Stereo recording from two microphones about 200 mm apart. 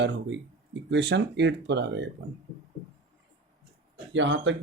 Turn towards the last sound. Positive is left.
turn(degrees=-65)  # may be behind; listen again after turning